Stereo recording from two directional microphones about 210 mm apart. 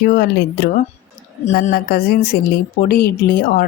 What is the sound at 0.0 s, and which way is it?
A woman's voice, 45° left (ahead or behind).